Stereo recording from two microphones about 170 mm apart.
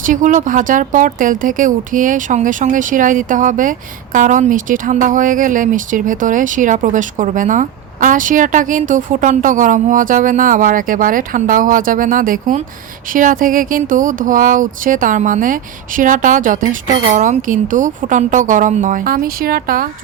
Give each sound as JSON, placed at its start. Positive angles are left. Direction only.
{"t": 0.0, "sound": "speech", "side_deg": -50}